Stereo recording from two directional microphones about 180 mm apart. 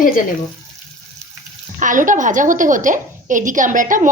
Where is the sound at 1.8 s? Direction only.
45° right (ahead or behind).